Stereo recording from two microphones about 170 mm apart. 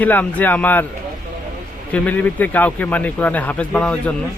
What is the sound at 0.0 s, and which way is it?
Speech, 10° left (ahead or behind).